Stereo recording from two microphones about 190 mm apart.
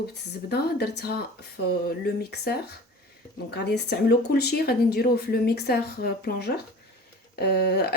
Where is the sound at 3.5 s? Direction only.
60° left (ahead or behind).